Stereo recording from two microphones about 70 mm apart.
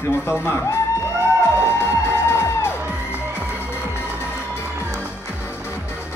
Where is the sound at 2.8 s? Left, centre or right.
Right.